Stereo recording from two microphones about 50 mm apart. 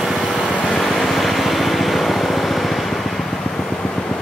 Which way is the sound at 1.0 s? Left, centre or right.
Centre.